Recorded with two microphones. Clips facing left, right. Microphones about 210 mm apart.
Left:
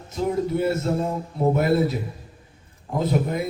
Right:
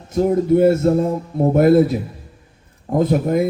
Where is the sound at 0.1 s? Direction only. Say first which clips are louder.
Right 8 dB; 50° right (ahead or behind).